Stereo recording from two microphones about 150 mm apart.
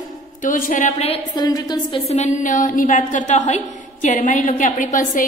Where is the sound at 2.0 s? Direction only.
50° left (ahead or behind).